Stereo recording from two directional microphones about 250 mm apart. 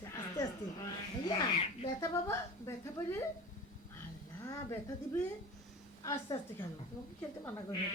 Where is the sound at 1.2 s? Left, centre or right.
Centre.